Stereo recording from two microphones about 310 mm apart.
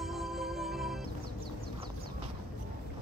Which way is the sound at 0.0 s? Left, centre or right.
Centre.